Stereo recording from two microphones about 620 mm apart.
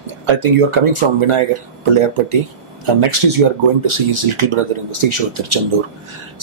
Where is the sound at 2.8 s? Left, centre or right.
Right.